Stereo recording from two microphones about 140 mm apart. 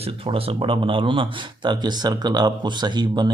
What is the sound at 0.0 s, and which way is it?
Speech, 40° right (ahead or behind).